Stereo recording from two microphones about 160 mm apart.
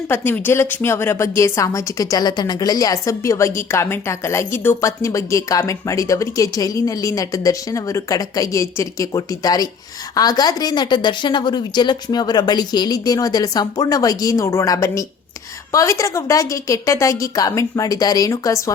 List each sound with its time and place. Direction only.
0.1 s a woman's voice: 15° left (ahead or behind)